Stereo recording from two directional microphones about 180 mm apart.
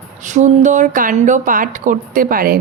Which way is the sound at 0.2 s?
40° right (ahead or behind).